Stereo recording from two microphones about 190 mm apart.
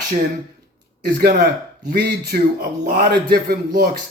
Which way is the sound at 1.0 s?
50° right (ahead or behind).